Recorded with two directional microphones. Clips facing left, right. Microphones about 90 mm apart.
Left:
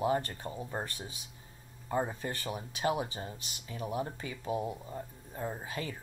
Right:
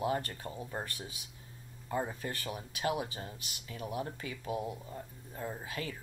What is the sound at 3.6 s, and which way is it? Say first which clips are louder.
Speech: left 2 dB; 15° left (ahead or behind).